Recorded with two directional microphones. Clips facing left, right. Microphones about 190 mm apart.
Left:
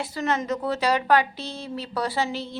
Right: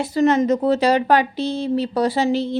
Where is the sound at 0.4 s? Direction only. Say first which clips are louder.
Right 8 dB; 20° right (ahead or behind).